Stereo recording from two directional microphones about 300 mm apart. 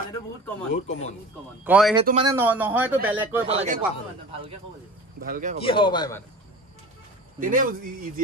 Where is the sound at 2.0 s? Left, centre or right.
Centre.